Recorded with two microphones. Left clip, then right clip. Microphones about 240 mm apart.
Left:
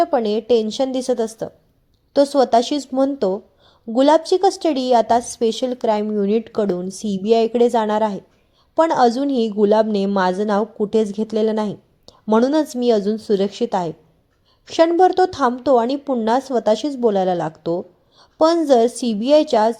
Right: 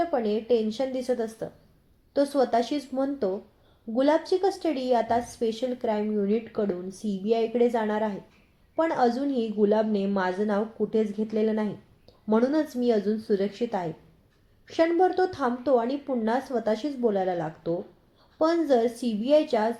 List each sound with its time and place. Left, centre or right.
0.0 s a woman's voice: left